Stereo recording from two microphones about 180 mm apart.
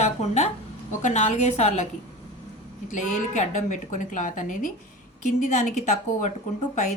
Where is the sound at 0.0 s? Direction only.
35° left (ahead or behind).